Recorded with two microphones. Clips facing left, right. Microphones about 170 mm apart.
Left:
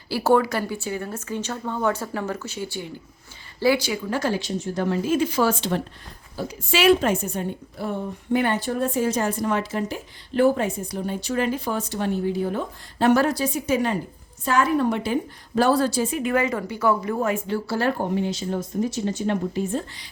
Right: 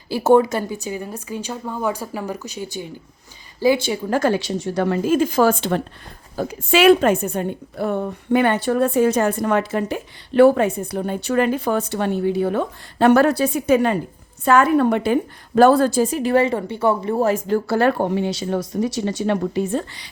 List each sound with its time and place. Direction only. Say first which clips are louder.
0.1 s a woman's voice: right 5 dB; 20° right (ahead or behind)
4.0 s a woman's voice: right 6 dB; 50° right (ahead or behind); by 4.9 s 75° right (ahead or behind)
5.0 s a woman's voice: right 5 dB; 45° right (ahead or behind); by 20.1 s 70° right (ahead or behind)